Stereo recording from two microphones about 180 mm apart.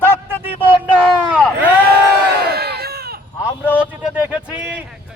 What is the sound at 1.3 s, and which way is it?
Speech, 5° right (ahead or behind).